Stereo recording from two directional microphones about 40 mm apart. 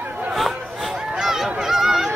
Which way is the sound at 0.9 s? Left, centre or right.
Centre.